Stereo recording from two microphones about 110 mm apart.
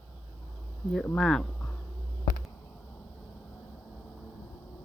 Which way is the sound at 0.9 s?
5° left (ahead or behind).